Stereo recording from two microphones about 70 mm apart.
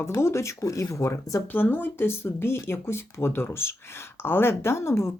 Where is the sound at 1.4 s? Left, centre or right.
Left.